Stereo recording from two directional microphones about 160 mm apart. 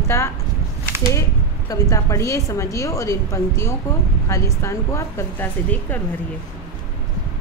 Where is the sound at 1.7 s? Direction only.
20° left (ahead or behind).